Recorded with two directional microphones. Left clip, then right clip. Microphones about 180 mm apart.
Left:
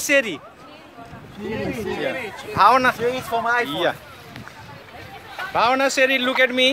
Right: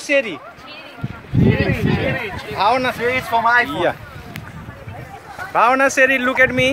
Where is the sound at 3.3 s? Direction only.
45° left (ahead or behind).